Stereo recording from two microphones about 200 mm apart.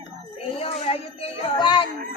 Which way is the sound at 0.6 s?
30° left (ahead or behind).